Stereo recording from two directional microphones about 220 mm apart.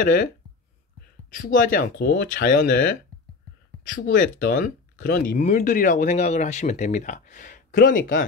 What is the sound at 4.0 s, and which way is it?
Speech, 40° left (ahead or behind).